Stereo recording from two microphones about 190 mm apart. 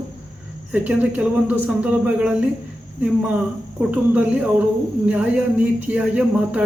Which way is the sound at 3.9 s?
10° right (ahead or behind).